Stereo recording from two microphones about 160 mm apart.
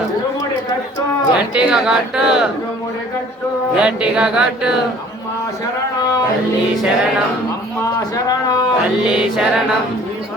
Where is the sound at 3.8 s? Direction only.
5° right (ahead or behind).